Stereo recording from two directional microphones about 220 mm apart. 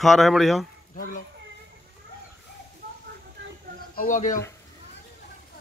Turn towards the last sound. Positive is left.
turn(degrees=35)  # may be behind; listen again after turning